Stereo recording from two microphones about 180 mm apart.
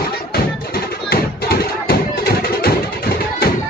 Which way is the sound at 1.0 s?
60° left (ahead or behind).